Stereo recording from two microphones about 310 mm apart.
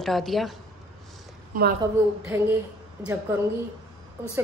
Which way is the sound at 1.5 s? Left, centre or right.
Right.